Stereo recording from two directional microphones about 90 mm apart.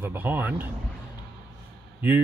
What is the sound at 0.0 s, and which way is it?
Speech, 20° right (ahead or behind).